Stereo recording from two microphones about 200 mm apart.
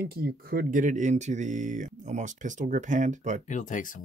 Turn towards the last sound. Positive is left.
turn(degrees=40)  # may be behind; listen again after turning